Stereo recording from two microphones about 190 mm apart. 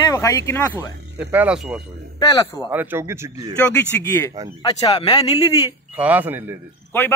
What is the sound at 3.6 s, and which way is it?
Speech, 10° left (ahead or behind).